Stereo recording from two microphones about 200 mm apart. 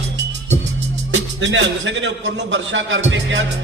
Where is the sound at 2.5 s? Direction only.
70° right (ahead or behind).